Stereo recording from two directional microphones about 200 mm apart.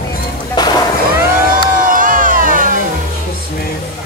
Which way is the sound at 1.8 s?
40° right (ahead or behind).